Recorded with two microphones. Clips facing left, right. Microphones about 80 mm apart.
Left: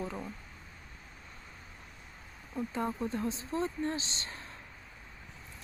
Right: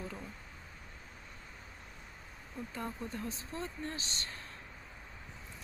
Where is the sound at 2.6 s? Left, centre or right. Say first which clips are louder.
Left 7 dB; left.